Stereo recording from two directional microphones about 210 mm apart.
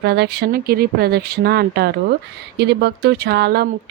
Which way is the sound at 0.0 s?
50° right (ahead or behind).